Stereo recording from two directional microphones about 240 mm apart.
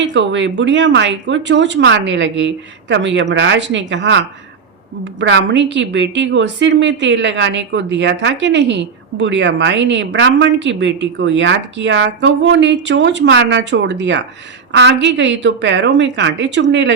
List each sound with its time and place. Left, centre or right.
0.0 s a woman's voice: right